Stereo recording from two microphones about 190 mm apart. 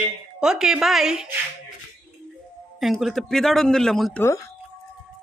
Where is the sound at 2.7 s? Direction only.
Centre (ahead or behind).